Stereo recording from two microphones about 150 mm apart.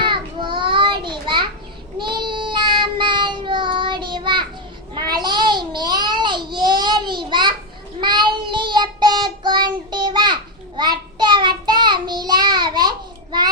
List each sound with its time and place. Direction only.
0.0 s child singing: 30° right (ahead or behind)
4.9 s babbling: 25° right (ahead or behind)
8.0 s child singing: 30° right (ahead or behind)